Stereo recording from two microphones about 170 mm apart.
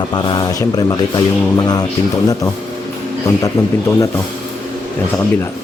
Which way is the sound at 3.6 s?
20° left (ahead or behind).